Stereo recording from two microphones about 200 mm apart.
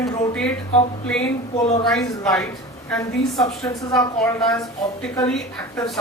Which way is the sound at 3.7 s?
15° left (ahead or behind).